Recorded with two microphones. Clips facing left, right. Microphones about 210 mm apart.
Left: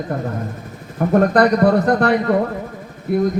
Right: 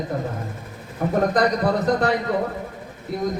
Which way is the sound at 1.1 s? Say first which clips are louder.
Left 6 dB; 60° left (ahead or behind).